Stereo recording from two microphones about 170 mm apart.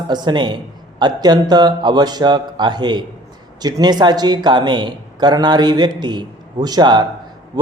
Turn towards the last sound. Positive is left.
turn(degrees=-25)  # may be behind; listen again after turning